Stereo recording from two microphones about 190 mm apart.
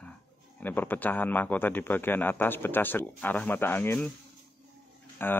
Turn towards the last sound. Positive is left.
turn(degrees=10)  # may be behind; listen again after turning